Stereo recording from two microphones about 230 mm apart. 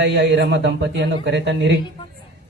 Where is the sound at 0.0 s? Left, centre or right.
Right.